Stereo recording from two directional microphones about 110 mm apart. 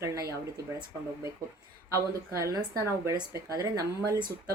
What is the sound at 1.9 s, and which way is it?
A woman's voice, 25° right (ahead or behind).